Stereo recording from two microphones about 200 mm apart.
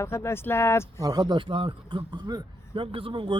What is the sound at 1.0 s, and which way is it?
A man's voice, 20° right (ahead or behind).